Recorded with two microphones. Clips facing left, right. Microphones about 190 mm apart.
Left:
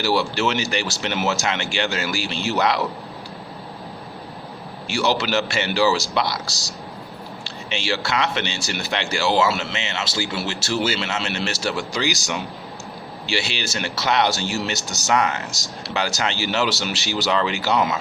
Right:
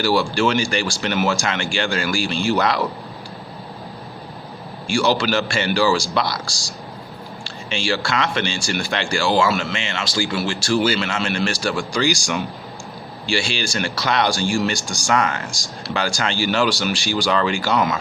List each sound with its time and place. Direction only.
0.0 s speech: 20° left (ahead or behind)
4.9 s speech: 20° left (ahead or behind)